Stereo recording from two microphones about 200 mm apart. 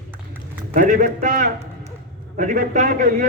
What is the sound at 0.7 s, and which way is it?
A man's voice, 40° right (ahead or behind).